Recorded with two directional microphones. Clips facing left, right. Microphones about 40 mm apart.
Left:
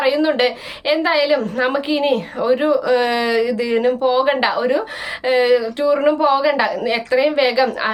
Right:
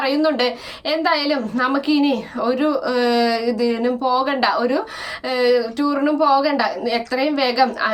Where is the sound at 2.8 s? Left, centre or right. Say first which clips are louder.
Left 1 dB; left.